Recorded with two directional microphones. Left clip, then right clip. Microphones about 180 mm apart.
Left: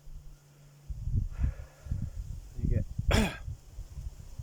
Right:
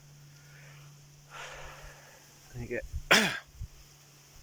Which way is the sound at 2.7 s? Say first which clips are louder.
Right 8 dB; 10° left (ahead or behind).